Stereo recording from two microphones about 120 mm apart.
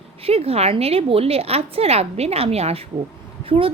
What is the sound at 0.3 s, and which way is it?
A woman's voice, 55° right (ahead or behind).